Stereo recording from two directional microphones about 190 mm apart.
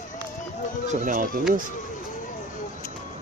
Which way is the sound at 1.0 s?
45° right (ahead or behind).